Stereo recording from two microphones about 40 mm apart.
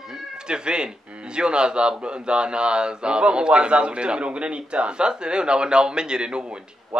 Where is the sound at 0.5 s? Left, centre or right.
Right.